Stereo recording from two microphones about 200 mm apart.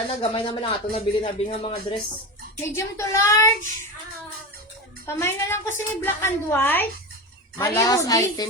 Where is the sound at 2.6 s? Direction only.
15° left (ahead or behind).